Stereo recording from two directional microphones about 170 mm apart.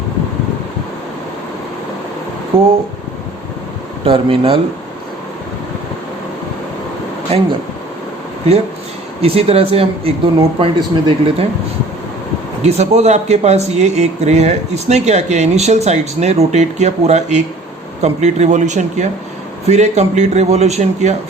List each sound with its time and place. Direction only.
2.5 s speech: 35° right (ahead or behind)
4.0 s speech: 30° right (ahead or behind)
7.3 s speech: 35° right (ahead or behind)
9.2 s speech: 35° right (ahead or behind)
12.6 s speech: 40° right (ahead or behind)